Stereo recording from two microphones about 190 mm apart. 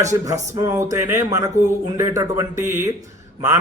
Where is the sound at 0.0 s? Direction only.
15° right (ahead or behind).